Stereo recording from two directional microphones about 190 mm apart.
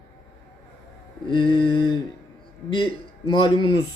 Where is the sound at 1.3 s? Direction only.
25° left (ahead or behind).